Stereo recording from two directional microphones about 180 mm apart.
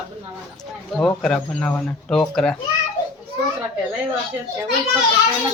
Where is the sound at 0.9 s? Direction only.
5° left (ahead or behind).